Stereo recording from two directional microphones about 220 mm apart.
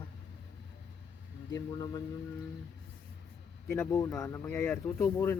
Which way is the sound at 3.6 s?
10° left (ahead or behind).